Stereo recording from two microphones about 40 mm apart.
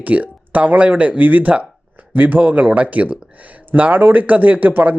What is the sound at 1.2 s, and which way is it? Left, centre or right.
Speech, right.